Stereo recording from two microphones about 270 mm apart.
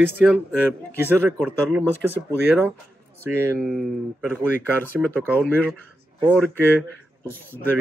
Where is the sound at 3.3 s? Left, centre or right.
Centre.